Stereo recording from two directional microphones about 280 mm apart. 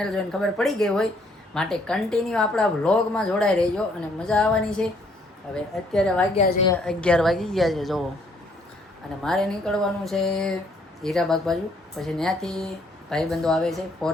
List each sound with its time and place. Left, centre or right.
0.2 s speech: centre
6.3 s a woman's voice: left
6.7 s speech: centre
9.2 s speech: centre